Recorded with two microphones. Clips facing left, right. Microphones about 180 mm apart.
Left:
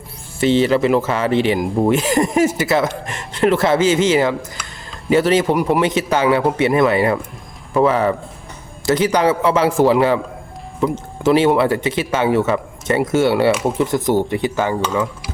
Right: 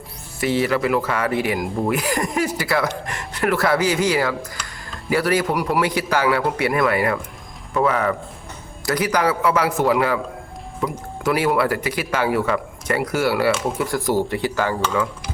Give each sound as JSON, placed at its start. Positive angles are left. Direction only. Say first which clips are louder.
{"t": 0.3, "sound": "speech", "louder": "left 5 dB", "side_deg": 25}